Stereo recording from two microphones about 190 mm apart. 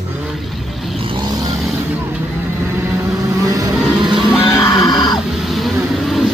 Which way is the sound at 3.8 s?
Centre (ahead or behind).